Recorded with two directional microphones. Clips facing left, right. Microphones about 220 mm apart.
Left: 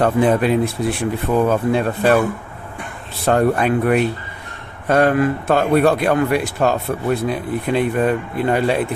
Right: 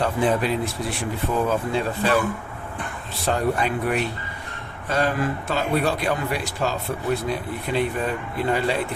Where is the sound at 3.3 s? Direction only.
55° left (ahead or behind).